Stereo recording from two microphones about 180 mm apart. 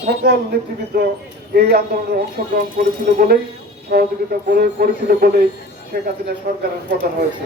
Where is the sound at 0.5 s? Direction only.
60° right (ahead or behind).